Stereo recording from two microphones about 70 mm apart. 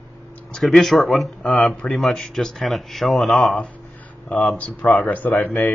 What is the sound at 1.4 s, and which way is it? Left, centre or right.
Speech, centre.